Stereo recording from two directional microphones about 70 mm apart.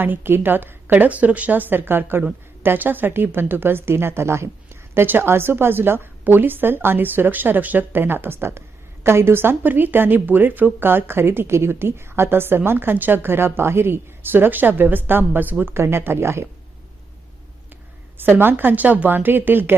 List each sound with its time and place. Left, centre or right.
0.0 s a woman's voice: right
15.7 s a woman's voice: right
18.2 s a woman's voice: right